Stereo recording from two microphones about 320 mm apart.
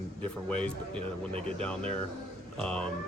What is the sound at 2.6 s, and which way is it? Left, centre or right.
Speech, centre.